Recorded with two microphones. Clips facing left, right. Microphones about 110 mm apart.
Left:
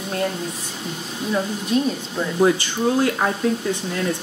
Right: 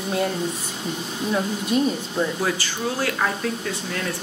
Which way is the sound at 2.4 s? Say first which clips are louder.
Left 7 dB; 20° left (ahead or behind).